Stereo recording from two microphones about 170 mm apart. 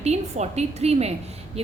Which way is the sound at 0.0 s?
40° right (ahead or behind).